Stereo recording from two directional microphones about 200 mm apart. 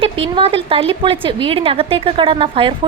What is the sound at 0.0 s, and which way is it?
A woman's voice, 30° right (ahead or behind).